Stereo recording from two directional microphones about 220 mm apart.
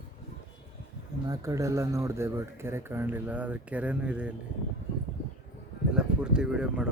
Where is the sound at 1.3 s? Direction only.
15° right (ahead or behind).